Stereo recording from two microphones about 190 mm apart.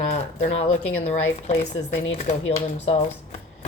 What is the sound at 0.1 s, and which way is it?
Speech, 35° left (ahead or behind).